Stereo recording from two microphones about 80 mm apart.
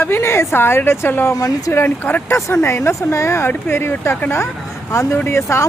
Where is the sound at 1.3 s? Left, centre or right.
Left.